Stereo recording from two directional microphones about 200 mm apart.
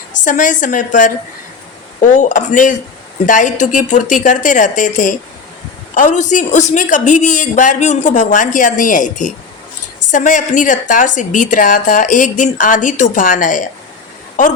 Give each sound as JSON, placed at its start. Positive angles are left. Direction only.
{"t": 0.1, "sound": "a woman's voice", "side_deg": 40}